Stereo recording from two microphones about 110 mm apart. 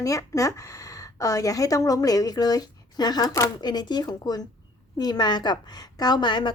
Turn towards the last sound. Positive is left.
turn(degrees=45)  # may be behind; listen again after turning